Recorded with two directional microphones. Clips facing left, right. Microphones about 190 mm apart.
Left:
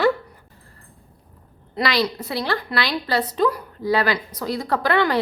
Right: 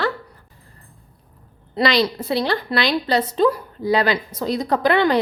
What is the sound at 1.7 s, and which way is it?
A woman's voice, 25° right (ahead or behind).